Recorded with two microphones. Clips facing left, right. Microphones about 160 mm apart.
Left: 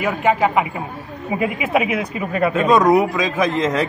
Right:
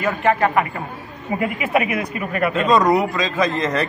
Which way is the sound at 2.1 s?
25° left (ahead or behind).